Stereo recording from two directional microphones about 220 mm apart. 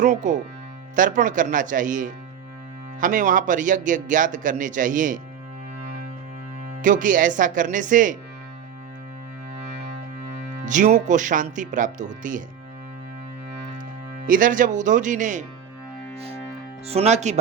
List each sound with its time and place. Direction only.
0.0 s speech: 35° right (ahead or behind)
6.8 s speech: 35° right (ahead or behind)
10.7 s speech: 35° right (ahead or behind)
14.3 s speech: 35° right (ahead or behind)
16.9 s speech: 30° right (ahead or behind)